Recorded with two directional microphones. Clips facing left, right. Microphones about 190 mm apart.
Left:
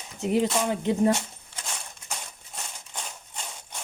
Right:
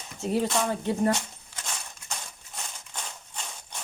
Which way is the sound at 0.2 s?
20° left (ahead or behind).